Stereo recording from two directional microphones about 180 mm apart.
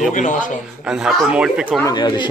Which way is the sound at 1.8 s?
25° left (ahead or behind).